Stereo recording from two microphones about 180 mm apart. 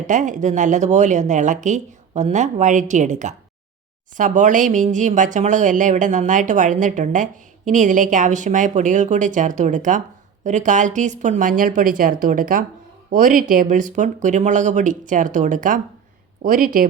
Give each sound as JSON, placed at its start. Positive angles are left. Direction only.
{"t": 0.1, "sound": "speech", "side_deg": -45}